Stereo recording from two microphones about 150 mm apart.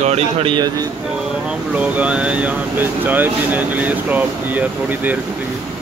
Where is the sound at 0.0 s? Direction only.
40° right (ahead or behind).